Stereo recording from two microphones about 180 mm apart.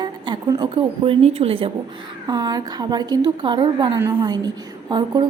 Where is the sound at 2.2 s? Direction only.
20° right (ahead or behind).